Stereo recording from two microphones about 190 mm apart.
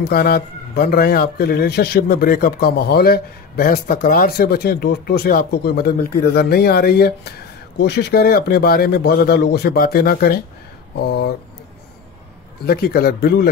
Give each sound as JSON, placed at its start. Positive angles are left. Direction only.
{"t": 0.0, "sound": "a man's voice", "side_deg": 55}
{"t": 12.6, "sound": "speech", "side_deg": 55}